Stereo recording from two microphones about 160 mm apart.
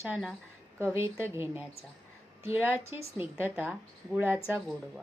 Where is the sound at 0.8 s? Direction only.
15° right (ahead or behind).